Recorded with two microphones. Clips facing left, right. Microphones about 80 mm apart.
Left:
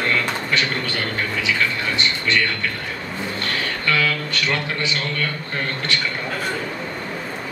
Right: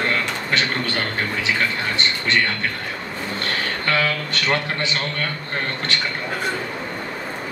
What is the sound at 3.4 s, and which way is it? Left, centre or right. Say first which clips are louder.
Speech: right 1 dB; right.